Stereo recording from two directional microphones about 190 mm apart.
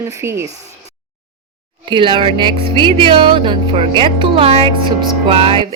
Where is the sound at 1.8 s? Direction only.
25° right (ahead or behind).